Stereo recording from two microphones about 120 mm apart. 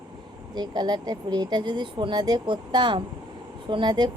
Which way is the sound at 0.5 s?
35° right (ahead or behind).